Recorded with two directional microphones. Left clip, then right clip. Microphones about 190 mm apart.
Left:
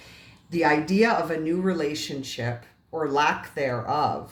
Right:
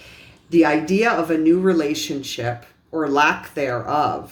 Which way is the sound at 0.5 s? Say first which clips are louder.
Right 5 dB; 35° right (ahead or behind).